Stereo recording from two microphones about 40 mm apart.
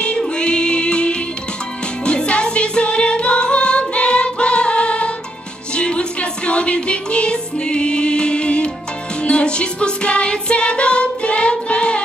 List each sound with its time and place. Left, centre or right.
0.4 s music: left